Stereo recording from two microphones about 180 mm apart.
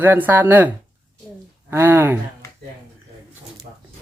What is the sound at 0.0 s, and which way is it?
Speech, 10° right (ahead or behind).